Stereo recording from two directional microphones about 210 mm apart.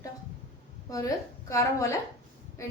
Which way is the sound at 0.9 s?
15° left (ahead or behind).